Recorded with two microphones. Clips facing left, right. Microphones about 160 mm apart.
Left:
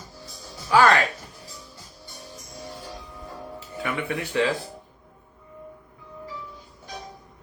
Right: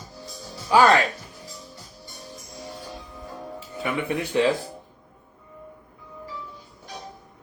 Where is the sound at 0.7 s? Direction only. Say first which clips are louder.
Right 1 dB; 15° right (ahead or behind).